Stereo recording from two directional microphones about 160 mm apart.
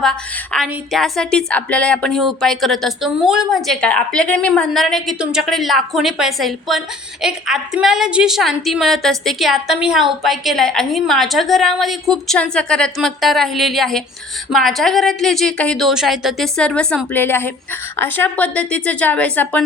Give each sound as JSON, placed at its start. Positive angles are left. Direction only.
{"t": 0.0, "sound": "a woman's voice", "side_deg": 5}